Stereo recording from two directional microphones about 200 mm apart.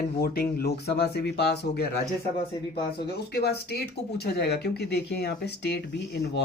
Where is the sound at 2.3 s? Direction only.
25° left (ahead or behind).